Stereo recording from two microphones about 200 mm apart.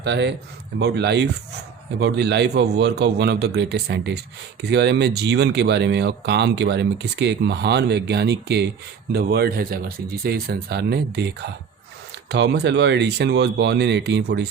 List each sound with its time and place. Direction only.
0.0 s speech: 60° right (ahead or behind)